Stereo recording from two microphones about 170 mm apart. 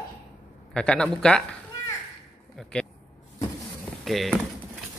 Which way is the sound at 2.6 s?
5° left (ahead or behind).